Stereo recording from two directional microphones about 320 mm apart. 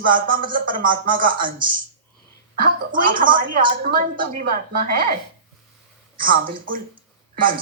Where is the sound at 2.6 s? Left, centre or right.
Right.